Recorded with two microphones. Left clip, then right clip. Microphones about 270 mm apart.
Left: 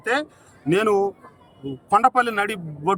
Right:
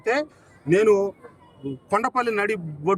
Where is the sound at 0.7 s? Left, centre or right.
Centre.